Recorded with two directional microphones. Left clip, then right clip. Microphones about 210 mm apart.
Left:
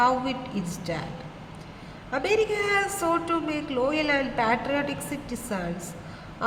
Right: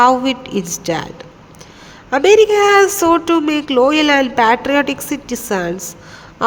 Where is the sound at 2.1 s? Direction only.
45° right (ahead or behind).